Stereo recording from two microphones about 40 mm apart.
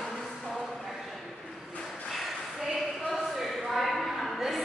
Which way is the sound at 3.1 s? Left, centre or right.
Centre.